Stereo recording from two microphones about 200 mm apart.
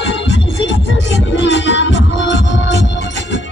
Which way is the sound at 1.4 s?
65° left (ahead or behind).